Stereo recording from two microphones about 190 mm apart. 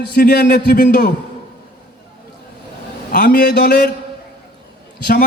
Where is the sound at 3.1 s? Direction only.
50° left (ahead or behind).